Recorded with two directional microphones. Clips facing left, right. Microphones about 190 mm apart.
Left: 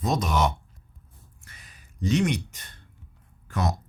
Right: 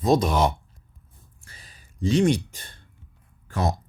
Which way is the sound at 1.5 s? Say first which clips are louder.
Right 4 dB; 30° right (ahead or behind).